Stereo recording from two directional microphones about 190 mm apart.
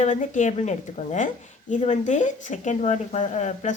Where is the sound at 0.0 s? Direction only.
40° left (ahead or behind).